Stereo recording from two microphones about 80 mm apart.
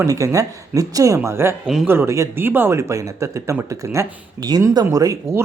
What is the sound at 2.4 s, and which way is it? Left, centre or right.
Speech, right.